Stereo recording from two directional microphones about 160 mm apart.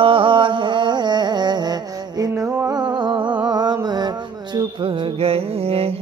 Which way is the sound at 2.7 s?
30° right (ahead or behind).